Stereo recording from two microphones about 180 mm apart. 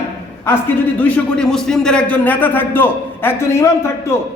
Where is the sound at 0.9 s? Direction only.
10° left (ahead or behind).